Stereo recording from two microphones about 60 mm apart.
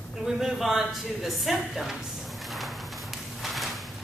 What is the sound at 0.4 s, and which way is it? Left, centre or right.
A woman's voice, centre.